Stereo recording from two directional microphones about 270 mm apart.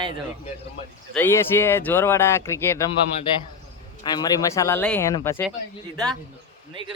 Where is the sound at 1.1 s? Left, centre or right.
Centre.